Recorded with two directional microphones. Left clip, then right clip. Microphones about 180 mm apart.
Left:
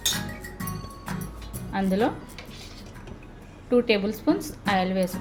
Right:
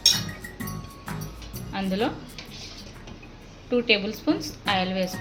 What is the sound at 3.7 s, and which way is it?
Speech, 20° left (ahead or behind).